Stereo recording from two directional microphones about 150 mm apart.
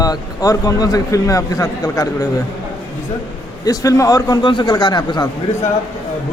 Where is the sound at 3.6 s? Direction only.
25° left (ahead or behind).